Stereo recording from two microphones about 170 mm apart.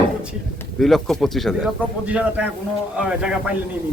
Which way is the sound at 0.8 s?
Centre (ahead or behind).